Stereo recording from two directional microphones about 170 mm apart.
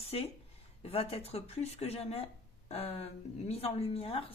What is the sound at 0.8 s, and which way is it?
Speech, 35° left (ahead or behind).